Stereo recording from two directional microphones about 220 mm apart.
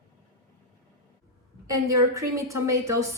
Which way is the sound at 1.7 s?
15° right (ahead or behind).